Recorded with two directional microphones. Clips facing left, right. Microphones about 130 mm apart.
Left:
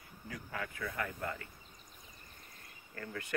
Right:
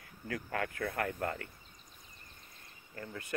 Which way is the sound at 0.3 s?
55° right (ahead or behind).